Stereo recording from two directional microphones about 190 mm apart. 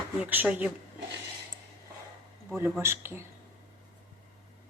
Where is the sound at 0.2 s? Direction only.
10° right (ahead or behind).